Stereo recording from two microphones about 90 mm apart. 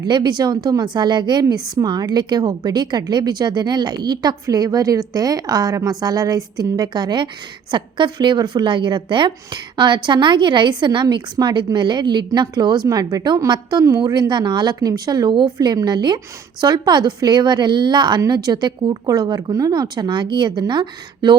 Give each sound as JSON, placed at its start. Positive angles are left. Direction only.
{"t": 0.0, "sound": "a woman's voice", "side_deg": -55}
{"t": 15.6, "sound": "a woman's voice", "side_deg": -50}